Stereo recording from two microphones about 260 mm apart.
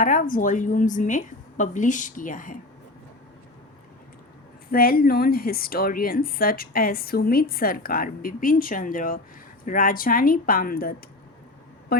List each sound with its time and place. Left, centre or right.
0.0 s a woman's voice: left
4.7 s a woman's voice: left